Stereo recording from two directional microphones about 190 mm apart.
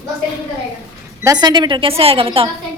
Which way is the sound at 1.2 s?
20° right (ahead or behind).